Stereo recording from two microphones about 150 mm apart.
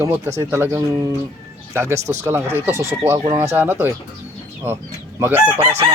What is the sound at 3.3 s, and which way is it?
Speech, 15° right (ahead or behind).